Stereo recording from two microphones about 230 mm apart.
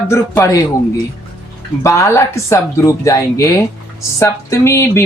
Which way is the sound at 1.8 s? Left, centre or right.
Centre.